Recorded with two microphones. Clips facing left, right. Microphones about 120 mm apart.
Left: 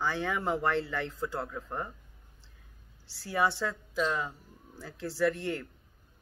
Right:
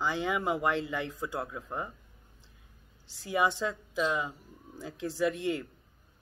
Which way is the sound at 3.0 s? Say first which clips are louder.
Right 1 dB; 15° right (ahead or behind).